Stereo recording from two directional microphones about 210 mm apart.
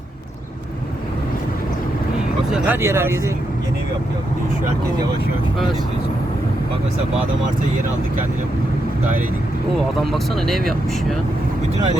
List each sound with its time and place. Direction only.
2.5 s speech: 10° right (ahead or behind)
10.1 s speech: centre (ahead or behind)